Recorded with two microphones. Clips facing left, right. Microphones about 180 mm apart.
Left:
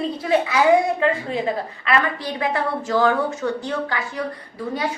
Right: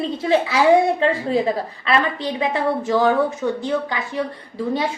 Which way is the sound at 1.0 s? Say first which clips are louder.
Right 3 dB; 35° right (ahead or behind).